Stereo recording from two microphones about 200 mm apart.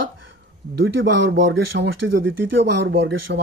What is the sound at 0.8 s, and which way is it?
Speech, 65° right (ahead or behind).